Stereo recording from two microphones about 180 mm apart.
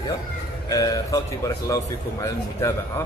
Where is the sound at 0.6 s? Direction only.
20° left (ahead or behind).